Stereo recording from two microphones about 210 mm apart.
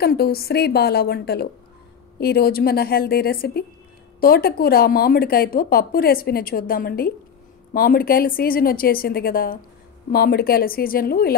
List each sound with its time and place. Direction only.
0.0 s speech: 50° left (ahead or behind)